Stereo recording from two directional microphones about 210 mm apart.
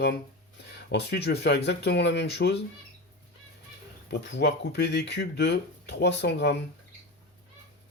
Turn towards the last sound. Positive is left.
turn(degrees=55)  # may be behind; listen again after turning